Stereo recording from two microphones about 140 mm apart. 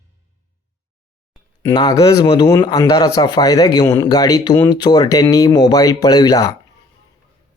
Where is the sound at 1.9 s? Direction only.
25° left (ahead or behind).